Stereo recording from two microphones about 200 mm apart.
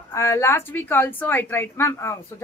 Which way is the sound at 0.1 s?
15° left (ahead or behind).